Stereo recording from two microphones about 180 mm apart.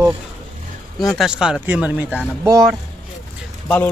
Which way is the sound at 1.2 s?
5° right (ahead or behind).